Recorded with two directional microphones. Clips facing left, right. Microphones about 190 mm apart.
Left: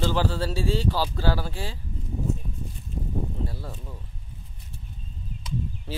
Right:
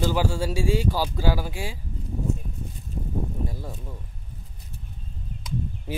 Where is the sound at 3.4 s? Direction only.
15° right (ahead or behind).